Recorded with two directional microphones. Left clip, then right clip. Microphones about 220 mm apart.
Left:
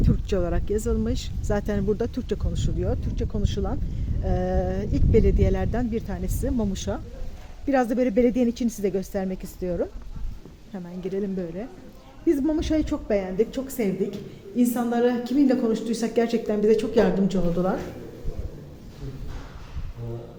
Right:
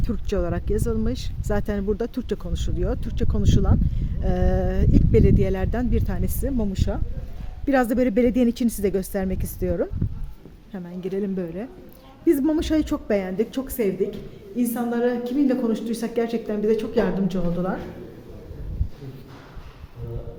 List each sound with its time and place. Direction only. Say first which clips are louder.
0.0 s a woman's voice: even; 5° right (ahead or behind)
7.7 s a woman's voice: right 2 dB; 20° right (ahead or behind); by 17.7 s 5° left (ahead or behind)